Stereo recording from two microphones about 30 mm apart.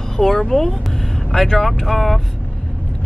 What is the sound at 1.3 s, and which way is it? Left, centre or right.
Speech, centre.